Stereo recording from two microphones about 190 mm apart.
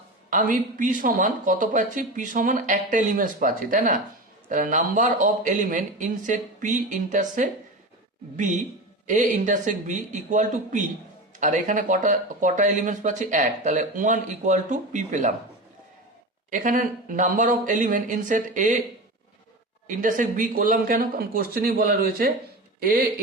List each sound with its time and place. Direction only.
0.3 s speech: 45° right (ahead or behind)
16.5 s speech: 45° right (ahead or behind)
19.9 s speech: 45° right (ahead or behind)